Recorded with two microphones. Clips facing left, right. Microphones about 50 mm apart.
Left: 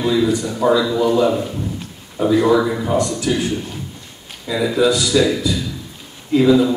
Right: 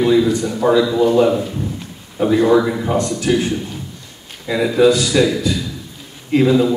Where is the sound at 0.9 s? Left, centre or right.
Right.